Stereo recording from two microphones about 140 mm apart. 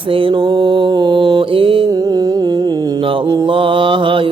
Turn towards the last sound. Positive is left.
turn(degrees=-40)  # may be behind; listen again after turning